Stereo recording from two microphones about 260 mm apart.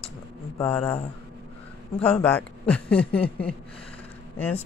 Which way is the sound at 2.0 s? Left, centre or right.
Centre.